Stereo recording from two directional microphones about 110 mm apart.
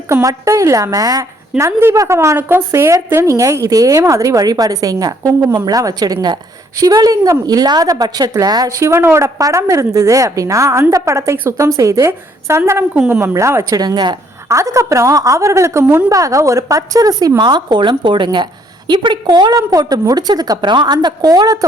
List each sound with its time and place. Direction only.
0.1 s a woman's voice: 25° right (ahead or behind)
13.7 s a woman's voice: 40° right (ahead or behind)
14.4 s a woman's voice: 25° right (ahead or behind)